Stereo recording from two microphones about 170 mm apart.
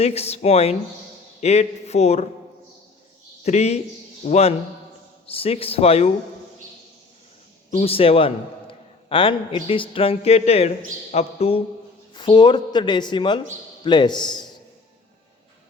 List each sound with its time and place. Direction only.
0.0 s speech: 35° left (ahead or behind)
3.4 s speech: 40° left (ahead or behind)
7.7 s a woman's voice: 35° left (ahead or behind)